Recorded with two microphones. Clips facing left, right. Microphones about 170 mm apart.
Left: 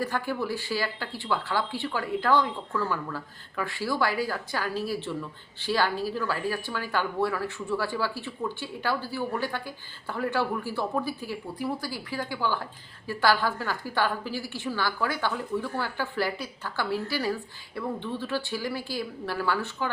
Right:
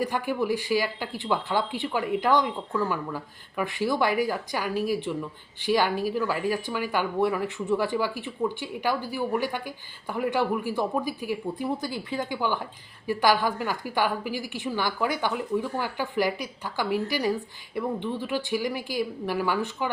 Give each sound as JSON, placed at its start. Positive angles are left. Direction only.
{"t": 0.0, "sound": "speech", "side_deg": -15}